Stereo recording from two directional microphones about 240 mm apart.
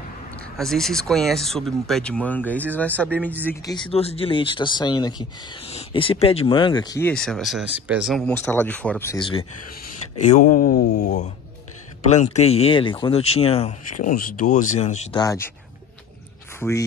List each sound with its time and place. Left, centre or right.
0.6 s speech: centre
3.7 s speech: left
10.3 s speech: left
12.1 s speech: left
15.1 s speech: centre
16.5 s speech: centre